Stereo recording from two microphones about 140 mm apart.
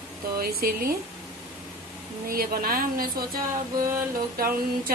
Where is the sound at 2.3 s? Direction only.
90° right.